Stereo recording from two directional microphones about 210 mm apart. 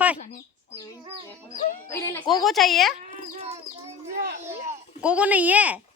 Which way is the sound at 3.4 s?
30° right (ahead or behind).